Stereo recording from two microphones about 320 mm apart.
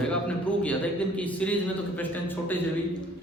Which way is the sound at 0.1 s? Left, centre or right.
Centre.